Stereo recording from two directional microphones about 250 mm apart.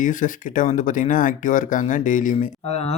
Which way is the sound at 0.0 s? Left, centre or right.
Left.